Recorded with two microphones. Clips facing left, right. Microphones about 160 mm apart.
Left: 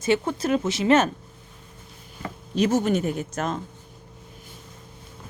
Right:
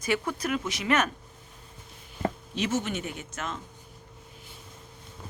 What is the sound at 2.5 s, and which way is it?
Speech, 40° left (ahead or behind).